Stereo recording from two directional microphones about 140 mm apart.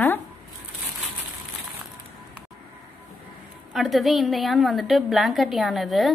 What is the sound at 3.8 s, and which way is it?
Speech, centre (ahead or behind).